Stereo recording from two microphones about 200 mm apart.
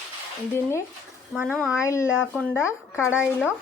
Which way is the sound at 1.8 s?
15° left (ahead or behind).